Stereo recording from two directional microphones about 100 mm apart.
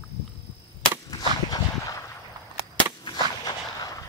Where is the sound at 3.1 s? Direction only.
45° left (ahead or behind).